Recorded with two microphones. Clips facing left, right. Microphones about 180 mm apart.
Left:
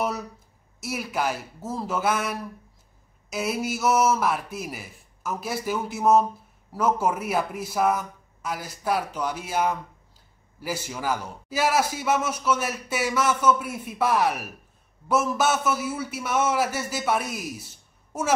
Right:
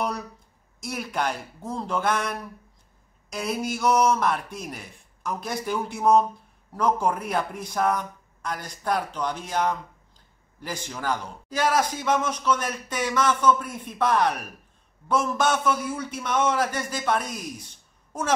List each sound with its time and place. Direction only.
0.7 s a man's voice: 5° left (ahead or behind)